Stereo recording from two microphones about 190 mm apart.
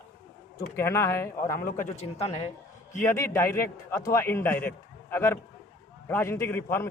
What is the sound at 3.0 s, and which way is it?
A man's voice, 10° left (ahead or behind).